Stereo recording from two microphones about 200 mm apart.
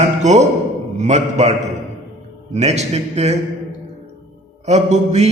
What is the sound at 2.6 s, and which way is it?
Speech, 35° right (ahead or behind).